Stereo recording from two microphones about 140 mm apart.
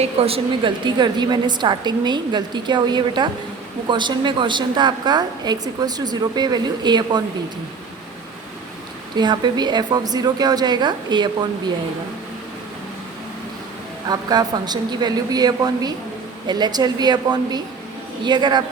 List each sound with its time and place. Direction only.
0.0 s a woman's voice: 45° right (ahead or behind)
9.1 s a woman's voice: 30° right (ahead or behind)
14.1 s a woman's voice: 30° right (ahead or behind)